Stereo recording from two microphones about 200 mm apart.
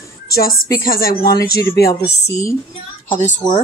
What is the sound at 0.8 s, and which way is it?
Speech, 45° left (ahead or behind).